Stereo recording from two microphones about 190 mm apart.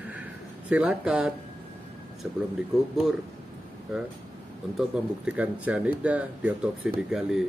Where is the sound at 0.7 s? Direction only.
5° right (ahead or behind).